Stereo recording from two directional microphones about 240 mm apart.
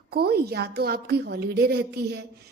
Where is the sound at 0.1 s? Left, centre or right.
Right.